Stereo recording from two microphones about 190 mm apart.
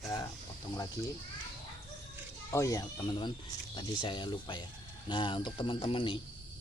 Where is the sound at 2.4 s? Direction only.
15° left (ahead or behind).